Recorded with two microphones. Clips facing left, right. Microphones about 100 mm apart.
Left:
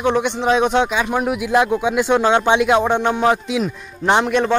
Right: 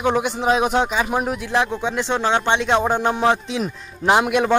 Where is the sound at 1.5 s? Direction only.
10° left (ahead or behind).